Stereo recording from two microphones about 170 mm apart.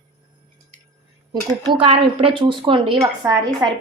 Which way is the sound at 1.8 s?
35° right (ahead or behind).